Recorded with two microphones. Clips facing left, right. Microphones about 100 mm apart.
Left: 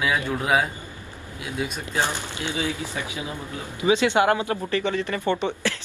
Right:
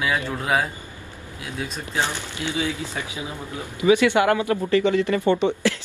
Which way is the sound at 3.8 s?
20° left (ahead or behind).